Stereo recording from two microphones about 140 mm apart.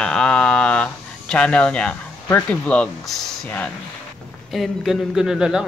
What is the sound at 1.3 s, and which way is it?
Speech, 5° left (ahead or behind).